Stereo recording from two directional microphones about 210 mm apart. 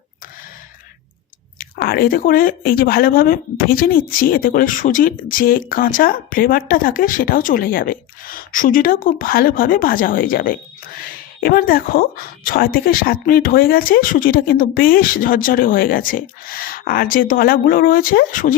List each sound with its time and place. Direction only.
1.5 s speech: 45° left (ahead or behind)